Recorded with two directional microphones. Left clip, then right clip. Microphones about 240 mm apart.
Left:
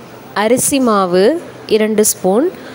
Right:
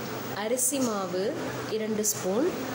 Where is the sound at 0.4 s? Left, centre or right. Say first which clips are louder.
Left 16 dB; left.